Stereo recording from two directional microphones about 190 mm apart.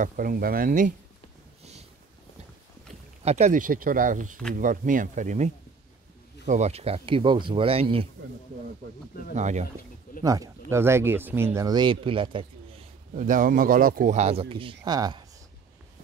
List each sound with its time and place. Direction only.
0.0 s speech: 45° right (ahead or behind)
1.6 s a sound: 35° right (ahead or behind)
3.3 s speech: 35° right (ahead or behind)
9.3 s speech: 40° right (ahead or behind)
10.2 s speech: 20° right (ahead or behind)
13.1 s speech: 45° right (ahead or behind); by 15.2 s 20° right (ahead or behind)